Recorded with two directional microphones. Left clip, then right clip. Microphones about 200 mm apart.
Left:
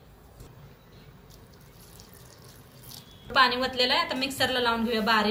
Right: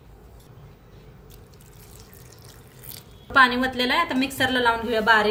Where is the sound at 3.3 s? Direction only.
50° right (ahead or behind).